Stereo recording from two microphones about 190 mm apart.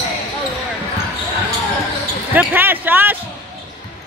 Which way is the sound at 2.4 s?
10° right (ahead or behind).